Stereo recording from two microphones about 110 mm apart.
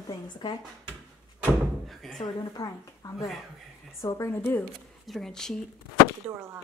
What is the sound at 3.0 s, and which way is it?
A woman's voice, 35° left (ahead or behind).